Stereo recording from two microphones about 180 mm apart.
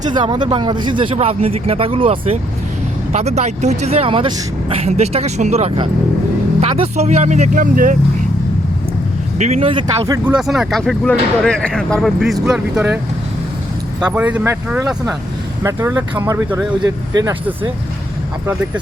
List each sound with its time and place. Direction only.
0.1 s speech: 25° right (ahead or behind); by 7.9 s 50° right (ahead or behind)
9.4 s speech: 35° right (ahead or behind)
10.2 s speech: 5° right (ahead or behind)
14.0 s speech: 10° right (ahead or behind)